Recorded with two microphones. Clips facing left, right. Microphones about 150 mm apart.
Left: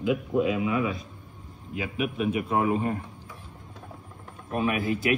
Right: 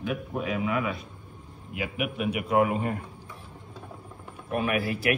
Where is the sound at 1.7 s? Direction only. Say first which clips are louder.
Left 1 dB; 30° left (ahead or behind).